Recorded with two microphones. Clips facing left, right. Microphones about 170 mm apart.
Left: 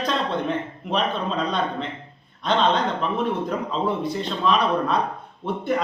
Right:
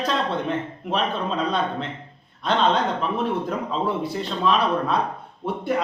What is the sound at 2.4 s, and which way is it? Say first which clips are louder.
A man's voice: even; 5° right (ahead or behind).